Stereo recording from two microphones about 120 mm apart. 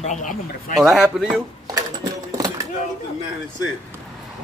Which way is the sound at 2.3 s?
30° right (ahead or behind).